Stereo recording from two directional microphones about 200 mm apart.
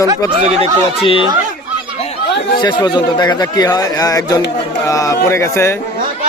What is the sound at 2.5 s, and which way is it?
A man's voice, 20° left (ahead or behind).